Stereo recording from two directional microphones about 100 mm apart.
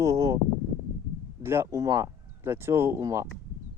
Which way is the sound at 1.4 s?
25° right (ahead or behind).